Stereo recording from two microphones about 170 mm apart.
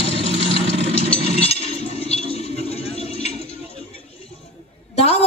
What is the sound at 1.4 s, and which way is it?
Chink, 35° left (ahead or behind).